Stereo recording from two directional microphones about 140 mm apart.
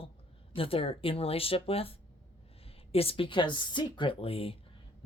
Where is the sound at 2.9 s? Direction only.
40° left (ahead or behind).